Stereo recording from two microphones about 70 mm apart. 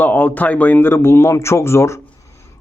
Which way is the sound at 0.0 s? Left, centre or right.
Left.